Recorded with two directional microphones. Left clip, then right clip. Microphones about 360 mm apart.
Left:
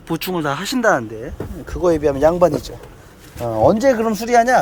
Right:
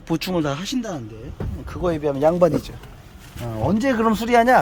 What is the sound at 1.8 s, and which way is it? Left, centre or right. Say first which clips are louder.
Speech: left 5 dB; centre.